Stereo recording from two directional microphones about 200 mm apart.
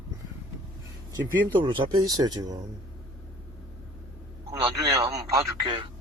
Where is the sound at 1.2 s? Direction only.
25° right (ahead or behind).